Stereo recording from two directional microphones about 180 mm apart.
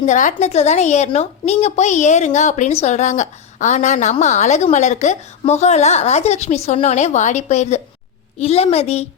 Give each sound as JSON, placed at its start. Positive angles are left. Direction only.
{"t": 0.0, "sound": "a woman's voice", "side_deg": 45}